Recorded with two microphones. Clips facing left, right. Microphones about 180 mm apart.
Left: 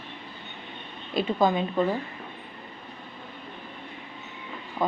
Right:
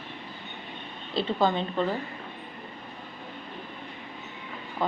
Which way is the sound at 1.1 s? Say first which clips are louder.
Left 2 dB; 15° left (ahead or behind).